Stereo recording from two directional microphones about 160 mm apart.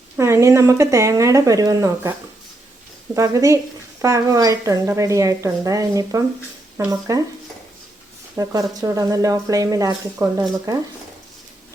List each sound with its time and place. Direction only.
0.2 s speech: 15° right (ahead or behind)
3.2 s speech: 20° right (ahead or behind)
8.4 s speech: 20° right (ahead or behind)